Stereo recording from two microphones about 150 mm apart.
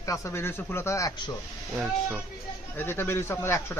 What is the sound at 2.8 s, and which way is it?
Speech, 15° left (ahead or behind).